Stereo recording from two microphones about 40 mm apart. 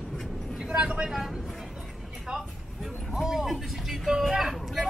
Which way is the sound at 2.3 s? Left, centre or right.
Right.